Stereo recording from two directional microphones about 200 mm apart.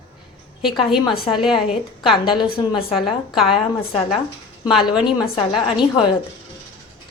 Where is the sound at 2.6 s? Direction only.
20° left (ahead or behind).